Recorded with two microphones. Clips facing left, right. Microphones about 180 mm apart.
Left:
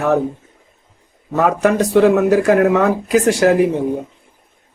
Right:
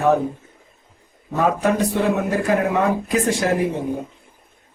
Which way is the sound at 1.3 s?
85° left.